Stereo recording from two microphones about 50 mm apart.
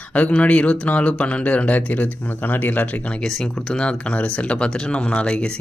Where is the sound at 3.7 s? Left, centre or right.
Left.